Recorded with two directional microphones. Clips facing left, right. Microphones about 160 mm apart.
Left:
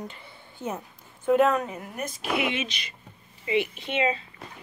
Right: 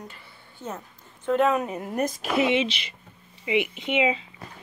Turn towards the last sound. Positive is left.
turn(degrees=-15)  # may be behind; listen again after turning